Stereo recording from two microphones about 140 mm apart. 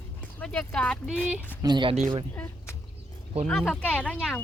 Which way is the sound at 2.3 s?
20° left (ahead or behind).